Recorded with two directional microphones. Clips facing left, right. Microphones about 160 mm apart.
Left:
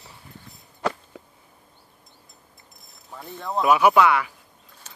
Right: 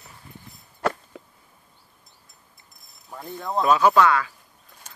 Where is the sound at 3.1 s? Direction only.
Centre (ahead or behind).